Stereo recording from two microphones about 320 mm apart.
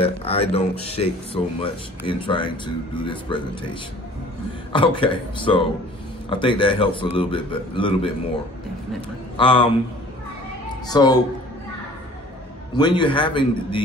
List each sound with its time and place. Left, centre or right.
0.0 s speech: centre
4.7 s speech: centre
9.4 s speech: centre
10.9 s speech: centre
12.7 s speech: centre